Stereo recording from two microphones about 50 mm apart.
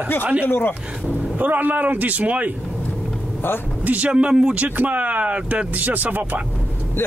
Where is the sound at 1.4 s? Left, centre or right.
Right.